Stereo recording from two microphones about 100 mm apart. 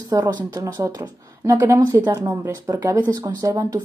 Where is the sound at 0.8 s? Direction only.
35° right (ahead or behind).